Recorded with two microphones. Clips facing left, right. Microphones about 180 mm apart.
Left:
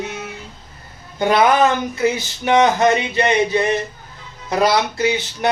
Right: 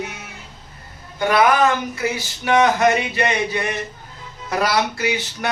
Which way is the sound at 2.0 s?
20° left (ahead or behind).